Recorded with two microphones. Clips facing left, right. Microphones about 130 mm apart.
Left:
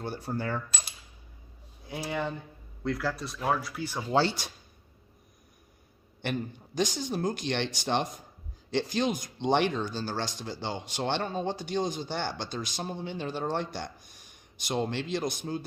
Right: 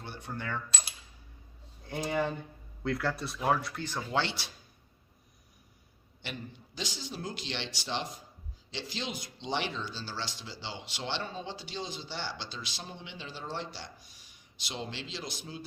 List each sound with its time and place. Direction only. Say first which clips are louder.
0.0 s coin: left 7 dB; 40° left (ahead or behind)
0.7 s coin: even; centre (ahead or behind)
2.0 s speech: right 1 dB; centre (ahead or behind)
4.1 s coin: left 7 dB; 40° left (ahead or behind)
6.2 s speech: left 9 dB; 50° left (ahead or behind)